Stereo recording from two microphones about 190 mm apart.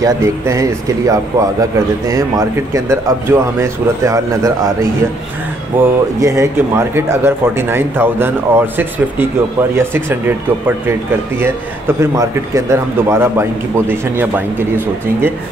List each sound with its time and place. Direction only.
0.0 s speech: 15° right (ahead or behind)
5.7 s speech: 10° right (ahead or behind)